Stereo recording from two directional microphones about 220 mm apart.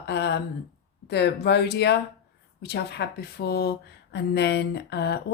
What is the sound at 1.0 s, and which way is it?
A woman's voice, 50° left (ahead or behind).